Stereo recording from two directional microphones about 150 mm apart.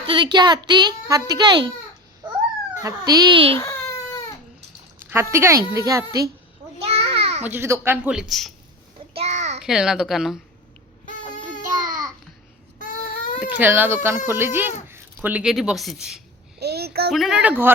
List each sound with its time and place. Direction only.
0.0 s a child's voice: 35° right (ahead or behind)
2.8 s a child's voice: 25° right (ahead or behind)
3.6 s baby cry: 20° left (ahead or behind)
5.1 s a child's voice: 15° right (ahead or behind)
6.8 s a sound: 40° right (ahead or behind)
7.4 s speech: 15° right (ahead or behind)
9.1 s a sound: 50° right (ahead or behind)
9.6 s a child's voice: 5° right (ahead or behind)
12.8 s baby cry: 65° left (ahead or behind)
13.4 s speech: 10° right (ahead or behind)
16.6 s a sound: 90° right
17.1 s a child's voice: centre (ahead or behind)